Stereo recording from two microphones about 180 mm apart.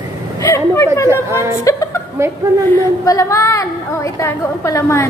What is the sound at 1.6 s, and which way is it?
Speech, 20° left (ahead or behind).